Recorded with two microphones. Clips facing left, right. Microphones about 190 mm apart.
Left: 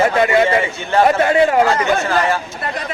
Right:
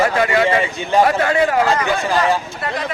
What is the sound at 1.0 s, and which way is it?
Speech, 25° left (ahead or behind).